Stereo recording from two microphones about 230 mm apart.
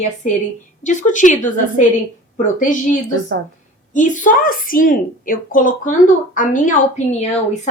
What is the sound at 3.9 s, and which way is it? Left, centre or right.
A woman's voice, left.